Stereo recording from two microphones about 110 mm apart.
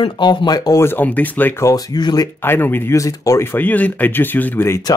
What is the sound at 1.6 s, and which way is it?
Speech, 35° left (ahead or behind).